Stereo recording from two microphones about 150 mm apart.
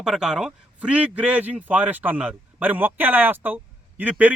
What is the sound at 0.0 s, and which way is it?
A man's voice, 5° right (ahead or behind).